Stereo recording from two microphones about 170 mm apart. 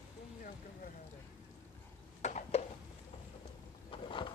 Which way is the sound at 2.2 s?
45° left (ahead or behind).